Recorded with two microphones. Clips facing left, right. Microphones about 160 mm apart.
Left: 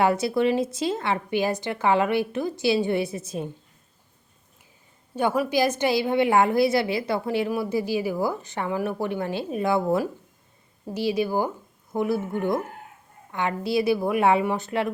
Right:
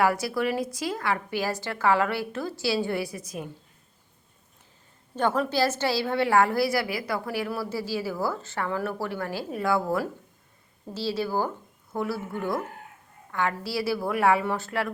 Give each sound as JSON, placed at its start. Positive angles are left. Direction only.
{"t": 0.0, "sound": "a woman's voice", "side_deg": 25}
{"t": 5.1, "sound": "a woman's voice", "side_deg": 10}